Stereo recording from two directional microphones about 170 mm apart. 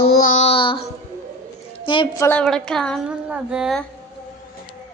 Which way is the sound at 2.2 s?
15° left (ahead or behind).